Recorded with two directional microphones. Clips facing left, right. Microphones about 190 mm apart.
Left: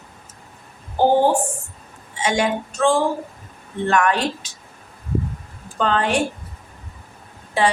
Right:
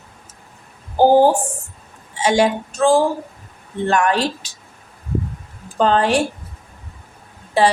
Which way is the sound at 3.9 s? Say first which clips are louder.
Right 1 dB; 30° right (ahead or behind).